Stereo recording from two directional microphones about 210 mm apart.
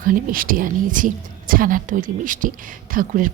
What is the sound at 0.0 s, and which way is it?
Speech, 40° right (ahead or behind).